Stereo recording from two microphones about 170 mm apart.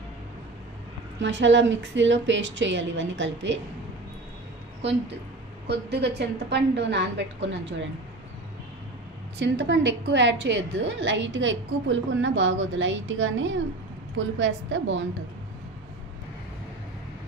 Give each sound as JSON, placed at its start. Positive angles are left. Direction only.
{"t": 1.2, "sound": "a woman's voice", "side_deg": -90}
{"t": 5.7, "sound": "a woman's voice", "side_deg": -85}
{"t": 9.4, "sound": "a woman's voice", "side_deg": -90}